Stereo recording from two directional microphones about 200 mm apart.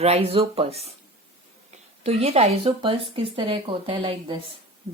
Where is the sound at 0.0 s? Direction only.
30° right (ahead or behind).